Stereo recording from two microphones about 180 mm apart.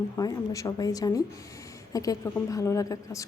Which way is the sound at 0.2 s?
20° left (ahead or behind).